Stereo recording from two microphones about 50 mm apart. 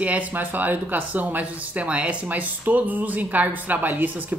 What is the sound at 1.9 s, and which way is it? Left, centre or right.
Speech, right.